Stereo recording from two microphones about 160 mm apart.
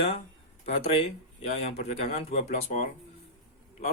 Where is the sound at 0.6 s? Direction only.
40° left (ahead or behind).